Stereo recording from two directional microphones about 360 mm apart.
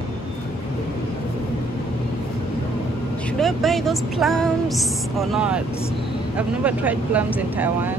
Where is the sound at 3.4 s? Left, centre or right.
Centre.